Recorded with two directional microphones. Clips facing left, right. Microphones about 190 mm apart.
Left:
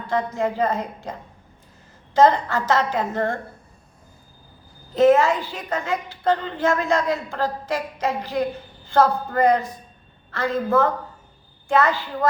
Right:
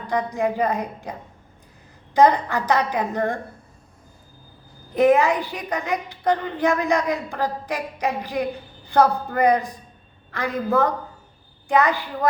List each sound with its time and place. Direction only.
0.1 s a woman's voice: 15° right (ahead or behind)
2.1 s a woman's voice: 15° right (ahead or behind)
4.9 s a woman's voice: 15° right (ahead or behind)
11.7 s a woman's voice: 15° right (ahead or behind)